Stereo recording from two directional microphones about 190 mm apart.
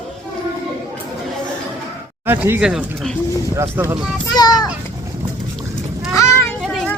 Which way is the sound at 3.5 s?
15° right (ahead or behind).